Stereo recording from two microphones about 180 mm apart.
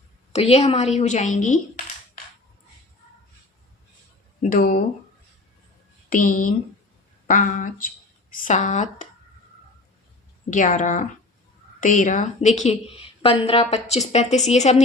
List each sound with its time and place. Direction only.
0.3 s a woman's voice: 35° left (ahead or behind)
4.4 s speech: 50° left (ahead or behind)
6.1 s speech: 50° left (ahead or behind)
10.5 s a woman's voice: 45° left (ahead or behind)